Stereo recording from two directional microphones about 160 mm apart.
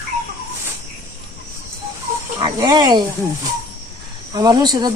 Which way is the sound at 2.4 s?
25° right (ahead or behind).